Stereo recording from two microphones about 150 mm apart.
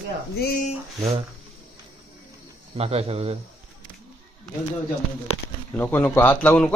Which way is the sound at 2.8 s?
45° right (ahead or behind).